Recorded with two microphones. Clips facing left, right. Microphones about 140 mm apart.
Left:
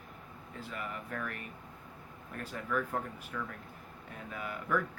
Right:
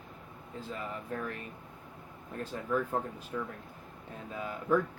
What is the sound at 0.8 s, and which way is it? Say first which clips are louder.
Speech: right 1 dB; 25° right (ahead or behind).